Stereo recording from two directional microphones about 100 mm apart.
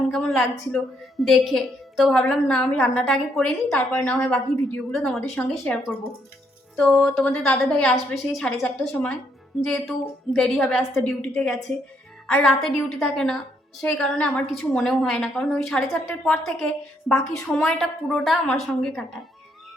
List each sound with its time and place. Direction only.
0.1 s a woman's voice: centre (ahead or behind)
2.6 s a woman's voice: 15° left (ahead or behind)
3.1 s a woman's voice: 5° left (ahead or behind)
14.8 s a woman's voice: centre (ahead or behind)